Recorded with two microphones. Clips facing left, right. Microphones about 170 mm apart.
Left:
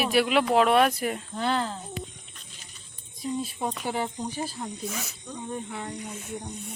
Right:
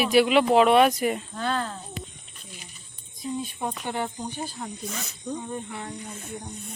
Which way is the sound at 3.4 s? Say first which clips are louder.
Left 1 dB; centre (ahead or behind).